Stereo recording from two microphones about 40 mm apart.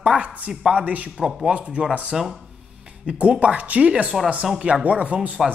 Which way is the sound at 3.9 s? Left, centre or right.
Right.